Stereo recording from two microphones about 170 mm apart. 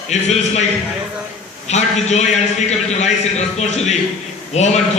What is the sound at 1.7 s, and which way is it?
A man's voice, 40° left (ahead or behind).